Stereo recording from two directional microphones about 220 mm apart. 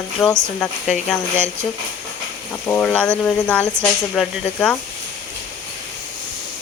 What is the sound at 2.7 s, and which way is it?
Speech, 5° left (ahead or behind).